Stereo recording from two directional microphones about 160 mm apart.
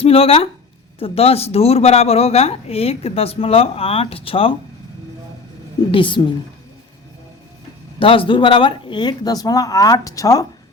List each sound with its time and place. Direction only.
0.0 s speech: 35° left (ahead or behind)
5.9 s speech: 30° left (ahead or behind)
7.9 s speech: 35° left (ahead or behind)